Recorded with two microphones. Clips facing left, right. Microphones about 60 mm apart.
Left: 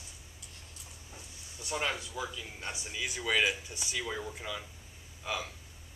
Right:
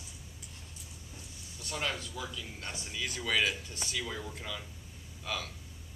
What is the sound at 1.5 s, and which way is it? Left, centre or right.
Speech, centre.